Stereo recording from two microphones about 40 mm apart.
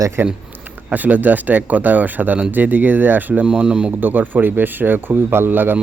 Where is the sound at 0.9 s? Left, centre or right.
Right.